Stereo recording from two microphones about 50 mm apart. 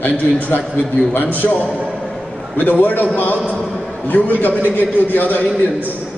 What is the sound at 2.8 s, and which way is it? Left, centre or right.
A man's voice, left.